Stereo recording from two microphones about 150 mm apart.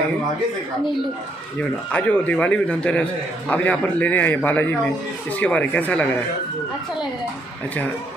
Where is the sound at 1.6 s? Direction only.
10° left (ahead or behind).